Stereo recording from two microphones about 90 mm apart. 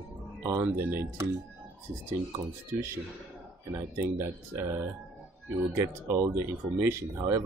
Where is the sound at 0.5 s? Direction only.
30° right (ahead or behind).